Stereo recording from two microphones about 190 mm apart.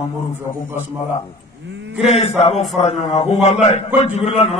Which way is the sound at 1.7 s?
70° right (ahead or behind).